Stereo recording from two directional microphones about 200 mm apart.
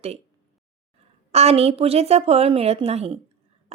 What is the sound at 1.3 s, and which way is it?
A woman's voice, 30° right (ahead or behind).